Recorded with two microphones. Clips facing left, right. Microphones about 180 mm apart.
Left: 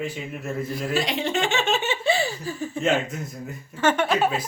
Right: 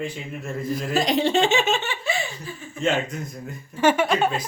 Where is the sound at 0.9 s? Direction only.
40° right (ahead or behind).